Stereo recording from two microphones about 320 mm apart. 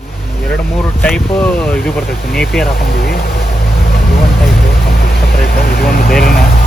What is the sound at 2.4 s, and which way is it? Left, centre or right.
Speech, centre.